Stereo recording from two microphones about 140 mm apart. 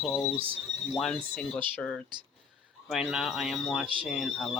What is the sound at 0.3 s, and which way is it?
Speech, 40° right (ahead or behind).